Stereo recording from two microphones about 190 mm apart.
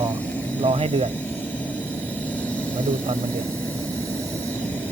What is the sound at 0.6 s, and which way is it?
Speech, 35° right (ahead or behind).